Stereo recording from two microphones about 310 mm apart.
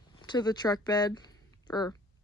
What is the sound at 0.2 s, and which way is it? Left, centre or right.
Speech, centre.